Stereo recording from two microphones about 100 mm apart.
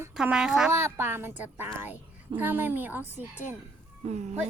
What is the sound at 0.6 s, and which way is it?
Speech, 25° right (ahead or behind).